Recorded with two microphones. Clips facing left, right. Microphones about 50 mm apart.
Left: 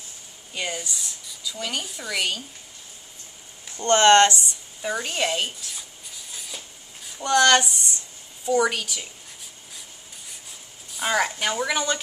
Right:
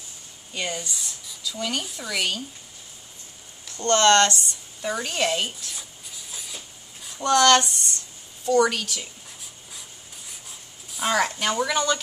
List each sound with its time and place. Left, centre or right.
0.5 s speech: centre
3.6 s speech: left
4.8 s writing: centre
7.0 s a sound: centre
8.5 s a woman's voice: centre
9.8 s rub: centre
10.9 s a woman's voice: centre